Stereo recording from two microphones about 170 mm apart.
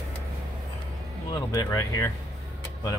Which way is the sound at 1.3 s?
20° left (ahead or behind).